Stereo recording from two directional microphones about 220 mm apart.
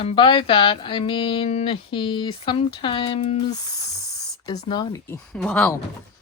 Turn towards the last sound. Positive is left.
turn(degrees=5)  # may be behind; listen again after turning